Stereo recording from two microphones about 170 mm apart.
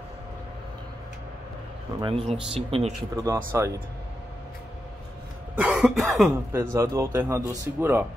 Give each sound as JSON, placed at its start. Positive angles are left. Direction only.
{"t": 2.0, "sound": "speech", "side_deg": -30}
{"t": 3.2, "sound": "speech", "side_deg": -15}
{"t": 5.6, "sound": "cough", "side_deg": -5}
{"t": 6.5, "sound": "speech", "side_deg": -15}